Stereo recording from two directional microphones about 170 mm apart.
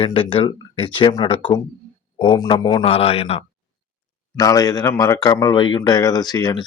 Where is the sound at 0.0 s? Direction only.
30° left (ahead or behind).